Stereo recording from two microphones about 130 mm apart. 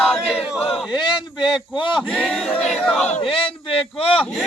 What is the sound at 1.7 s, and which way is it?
Speech, 40° left (ahead or behind).